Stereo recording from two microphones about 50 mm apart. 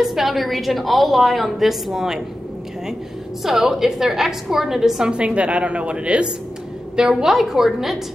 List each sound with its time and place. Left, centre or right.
0.0 s a woman's voice: centre
3.4 s a woman's voice: centre
5.1 s a woman's voice: right; by 8.0 s centre